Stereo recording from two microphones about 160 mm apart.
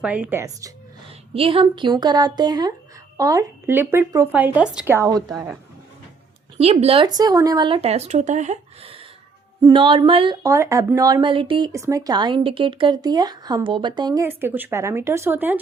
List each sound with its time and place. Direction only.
0.0 s speech: 10° right (ahead or behind)
1.3 s speech: 35° right (ahead or behind); by 4.9 s 5° right (ahead or behind)
4.9 s speech: 20° right (ahead or behind)
6.6 s speech: 40° right (ahead or behind)
10.4 s speech: 20° right (ahead or behind)
14.3 s speech: 10° right (ahead or behind)